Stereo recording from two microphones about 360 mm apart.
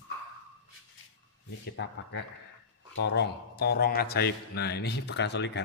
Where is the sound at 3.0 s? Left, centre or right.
Left.